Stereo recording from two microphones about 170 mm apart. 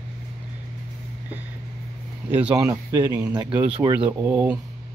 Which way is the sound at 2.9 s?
20° right (ahead or behind).